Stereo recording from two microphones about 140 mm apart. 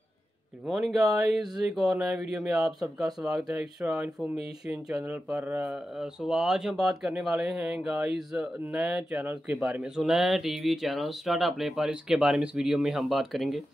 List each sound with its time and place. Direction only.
0.7 s speech: centre (ahead or behind)